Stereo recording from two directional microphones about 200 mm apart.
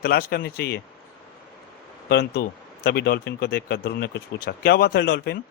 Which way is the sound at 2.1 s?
50° left (ahead or behind).